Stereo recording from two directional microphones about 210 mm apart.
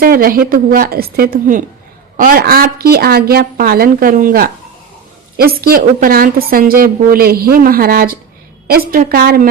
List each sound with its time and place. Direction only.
0.0 s a woman's voice: 45° right (ahead or behind)